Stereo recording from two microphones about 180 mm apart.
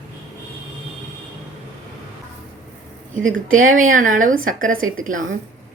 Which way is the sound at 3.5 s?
45° right (ahead or behind).